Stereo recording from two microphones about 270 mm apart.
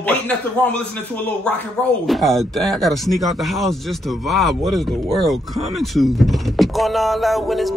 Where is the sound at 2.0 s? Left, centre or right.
Centre.